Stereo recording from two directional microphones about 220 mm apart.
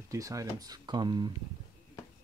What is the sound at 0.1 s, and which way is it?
Speech, 15° right (ahead or behind).